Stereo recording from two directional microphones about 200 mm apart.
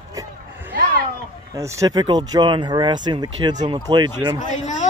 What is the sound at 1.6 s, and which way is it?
Speech, 15° right (ahead or behind).